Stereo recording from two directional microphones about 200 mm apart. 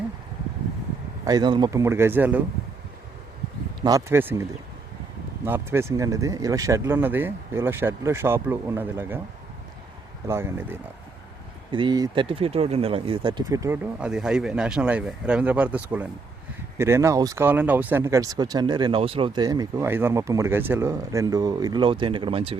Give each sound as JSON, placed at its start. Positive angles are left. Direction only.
{"t": 1.2, "sound": "speech", "side_deg": -20}
{"t": 3.8, "sound": "speech", "side_deg": -20}
{"t": 5.5, "sound": "speech", "side_deg": -10}
{"t": 10.2, "sound": "speech", "side_deg": -10}
{"t": 11.7, "sound": "speech", "side_deg": -25}
{"t": 14.0, "sound": "speech", "side_deg": -5}